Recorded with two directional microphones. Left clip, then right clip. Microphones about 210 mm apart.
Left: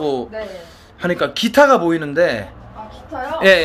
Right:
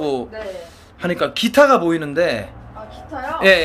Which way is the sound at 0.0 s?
Centre (ahead or behind).